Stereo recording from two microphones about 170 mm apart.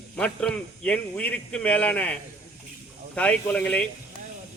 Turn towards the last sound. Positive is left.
turn(degrees=10)  # may be behind; listen again after turning